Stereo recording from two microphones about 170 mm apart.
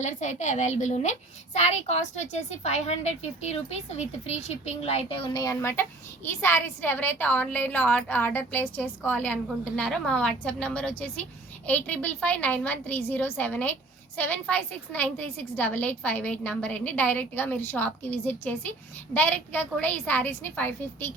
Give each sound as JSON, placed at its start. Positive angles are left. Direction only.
{"t": 0.0, "sound": "a woman's voice", "side_deg": 45}